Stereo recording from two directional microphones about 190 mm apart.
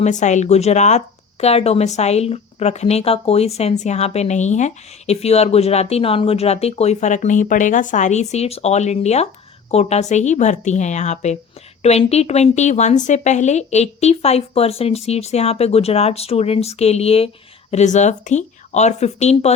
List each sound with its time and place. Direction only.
0.0 s speech: 40° left (ahead or behind)